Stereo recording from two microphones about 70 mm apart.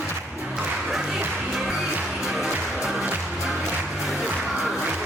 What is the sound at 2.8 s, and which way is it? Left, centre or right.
Music, centre.